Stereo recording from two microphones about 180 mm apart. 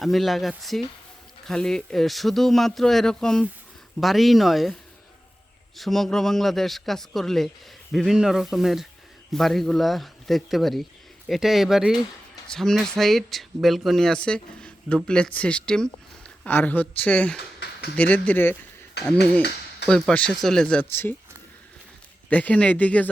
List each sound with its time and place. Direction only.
0.0 s speech: centre (ahead or behind)
17.6 s a sound: 60° left (ahead or behind)
17.9 s speech: 10° left (ahead or behind)
19.4 s a sound: 70° left (ahead or behind)
19.9 s speech: 5° left (ahead or behind)
22.3 s speech: 10° left (ahead or behind)